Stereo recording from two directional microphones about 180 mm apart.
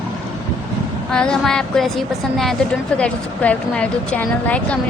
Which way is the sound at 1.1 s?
5° left (ahead or behind).